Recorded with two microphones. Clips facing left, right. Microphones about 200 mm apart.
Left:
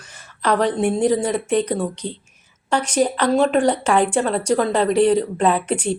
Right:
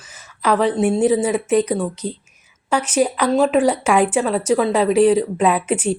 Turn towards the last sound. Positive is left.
turn(degrees=-10)  # may be behind; listen again after turning